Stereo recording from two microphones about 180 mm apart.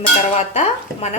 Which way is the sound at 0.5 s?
40° left (ahead or behind).